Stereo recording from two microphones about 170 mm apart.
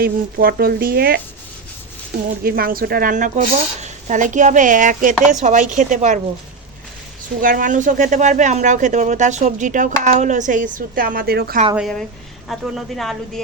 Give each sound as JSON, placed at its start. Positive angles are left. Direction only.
{"t": 0.0, "sound": "speech", "side_deg": -60}
{"t": 2.4, "sound": "speech", "side_deg": -60}
{"t": 7.4, "sound": "speech", "side_deg": -55}
{"t": 11.8, "sound": "speech", "side_deg": 0}